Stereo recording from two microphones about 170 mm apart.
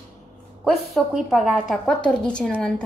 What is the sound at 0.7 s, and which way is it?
A woman's voice, centre (ahead or behind).